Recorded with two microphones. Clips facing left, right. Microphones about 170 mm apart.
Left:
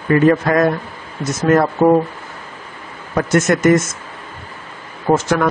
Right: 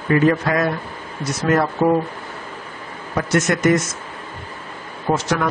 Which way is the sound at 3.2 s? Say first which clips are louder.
Left 4 dB; 50° left (ahead or behind).